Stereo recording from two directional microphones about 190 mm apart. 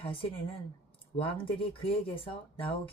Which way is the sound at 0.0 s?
30° left (ahead or behind).